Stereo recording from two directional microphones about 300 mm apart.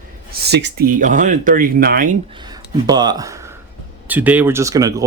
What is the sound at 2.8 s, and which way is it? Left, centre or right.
Speech, centre.